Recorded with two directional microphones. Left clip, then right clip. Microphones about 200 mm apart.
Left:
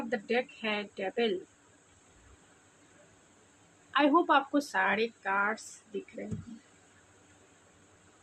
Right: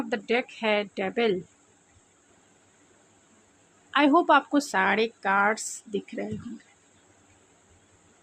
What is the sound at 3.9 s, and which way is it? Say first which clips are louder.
Speech: right 5 dB; 40° right (ahead or behind).